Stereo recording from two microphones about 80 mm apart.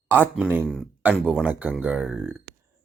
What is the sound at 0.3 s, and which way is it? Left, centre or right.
Speech, centre.